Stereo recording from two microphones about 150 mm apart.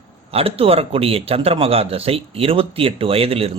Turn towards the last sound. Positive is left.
turn(degrees=-40)  # may be behind; listen again after turning